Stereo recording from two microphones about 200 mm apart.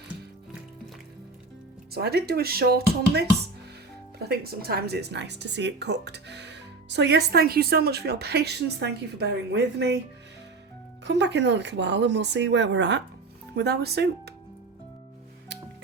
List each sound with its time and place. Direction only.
1.9 s speech: 55° right (ahead or behind)
11.0 s speech: 60° right (ahead or behind)